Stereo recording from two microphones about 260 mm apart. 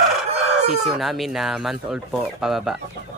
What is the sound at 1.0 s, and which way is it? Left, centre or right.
Speech, centre.